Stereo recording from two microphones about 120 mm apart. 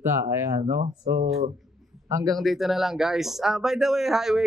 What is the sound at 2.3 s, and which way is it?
Speech, centre (ahead or behind).